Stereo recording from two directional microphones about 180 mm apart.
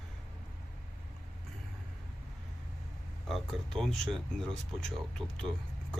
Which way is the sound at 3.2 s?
Centre (ahead or behind).